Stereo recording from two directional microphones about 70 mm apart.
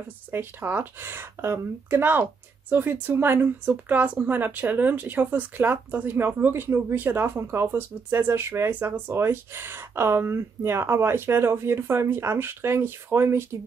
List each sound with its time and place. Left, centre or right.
0.3 s speech: right